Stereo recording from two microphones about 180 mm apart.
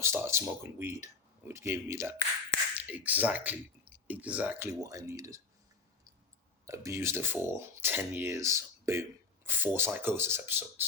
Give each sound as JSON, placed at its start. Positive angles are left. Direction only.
{"t": 0.0, "sound": "speech", "side_deg": -15}
{"t": 4.8, "sound": "speech", "side_deg": -20}
{"t": 6.7, "sound": "speech", "side_deg": -15}